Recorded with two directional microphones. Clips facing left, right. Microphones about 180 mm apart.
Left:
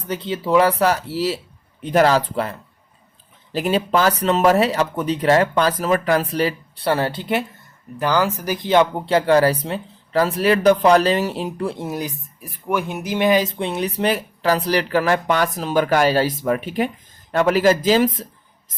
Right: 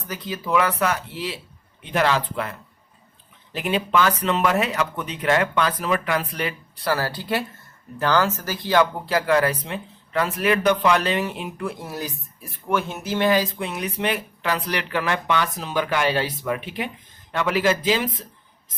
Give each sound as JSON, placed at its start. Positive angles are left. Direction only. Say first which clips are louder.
{"t": 0.1, "sound": "speech", "louder": "left 5 dB", "side_deg": 30}
{"t": 11.9, "sound": "speech", "louder": "left 5 dB", "side_deg": 20}